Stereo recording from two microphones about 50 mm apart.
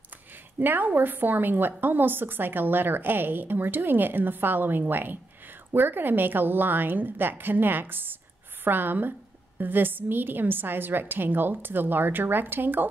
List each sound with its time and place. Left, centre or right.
0.6 s a woman's voice: right